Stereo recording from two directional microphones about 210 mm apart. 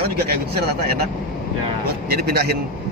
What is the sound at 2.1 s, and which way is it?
Speech, 50° right (ahead or behind).